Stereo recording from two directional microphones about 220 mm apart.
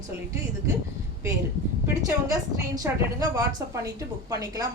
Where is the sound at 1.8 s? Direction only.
15° right (ahead or behind).